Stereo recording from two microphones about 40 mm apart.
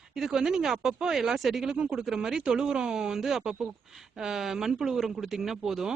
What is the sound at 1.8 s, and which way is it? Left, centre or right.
Speech, right.